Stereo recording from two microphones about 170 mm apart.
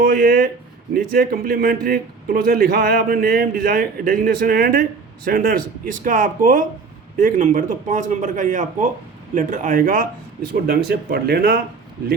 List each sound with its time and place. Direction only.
0.0 s a man's voice: 55° right (ahead or behind)